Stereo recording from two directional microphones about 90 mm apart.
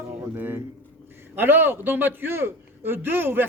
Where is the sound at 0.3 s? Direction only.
20° right (ahead or behind).